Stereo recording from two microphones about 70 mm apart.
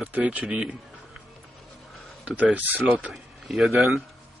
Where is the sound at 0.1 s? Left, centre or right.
Right.